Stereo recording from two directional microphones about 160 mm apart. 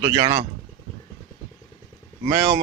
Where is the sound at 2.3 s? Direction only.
20° right (ahead or behind).